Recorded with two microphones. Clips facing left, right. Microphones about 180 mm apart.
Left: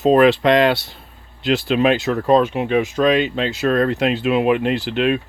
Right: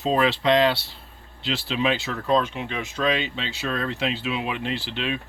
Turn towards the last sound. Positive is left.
turn(degrees=55)  # may be behind; listen again after turning